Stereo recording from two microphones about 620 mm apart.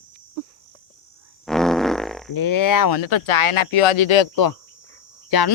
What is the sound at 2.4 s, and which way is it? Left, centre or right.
Speech, left.